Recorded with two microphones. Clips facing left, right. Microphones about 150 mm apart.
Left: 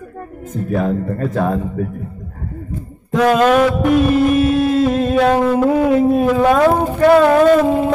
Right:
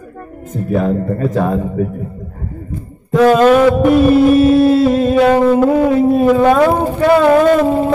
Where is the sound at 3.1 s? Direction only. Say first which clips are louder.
Right 4 dB; centre (ahead or behind).